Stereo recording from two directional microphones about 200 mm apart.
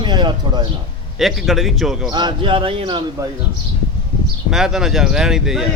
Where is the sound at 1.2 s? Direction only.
Centre (ahead or behind).